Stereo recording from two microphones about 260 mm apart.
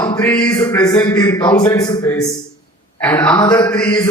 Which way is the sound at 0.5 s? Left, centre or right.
Centre.